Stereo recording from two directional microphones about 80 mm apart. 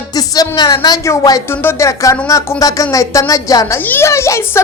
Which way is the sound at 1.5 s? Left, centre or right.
Left.